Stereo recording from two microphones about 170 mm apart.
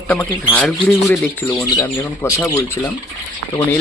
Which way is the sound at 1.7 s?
20° left (ahead or behind).